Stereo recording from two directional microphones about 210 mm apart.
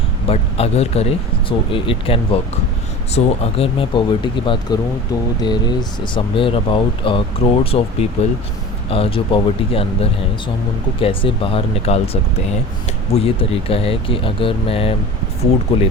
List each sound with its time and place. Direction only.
0.3 s speech: 30° left (ahead or behind)